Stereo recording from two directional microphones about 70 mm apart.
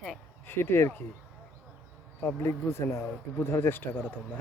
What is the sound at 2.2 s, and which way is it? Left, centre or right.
Speech, left.